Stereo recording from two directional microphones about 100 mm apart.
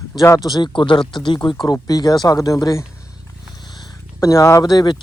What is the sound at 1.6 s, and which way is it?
Speech, 40° left (ahead or behind).